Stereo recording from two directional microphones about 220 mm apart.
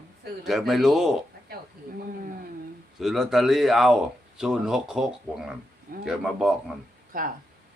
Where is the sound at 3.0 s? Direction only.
Centre (ahead or behind).